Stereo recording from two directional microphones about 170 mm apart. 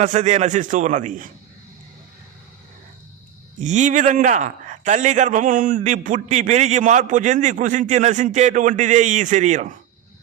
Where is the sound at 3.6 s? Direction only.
45° right (ahead or behind).